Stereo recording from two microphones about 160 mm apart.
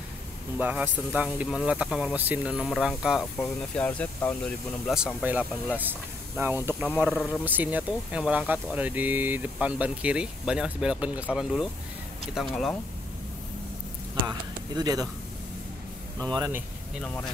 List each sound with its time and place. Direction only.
0.6 s speech: 10° right (ahead or behind); by 4.6 s 10° left (ahead or behind)
4.8 s speech: 5° right (ahead or behind)
14.8 s speech: 25° right (ahead or behind)
16.3 s speech: 25° right (ahead or behind)
17.0 s speech: 5° left (ahead or behind)